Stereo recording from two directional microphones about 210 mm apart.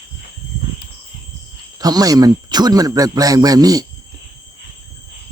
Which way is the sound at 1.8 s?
15° right (ahead or behind).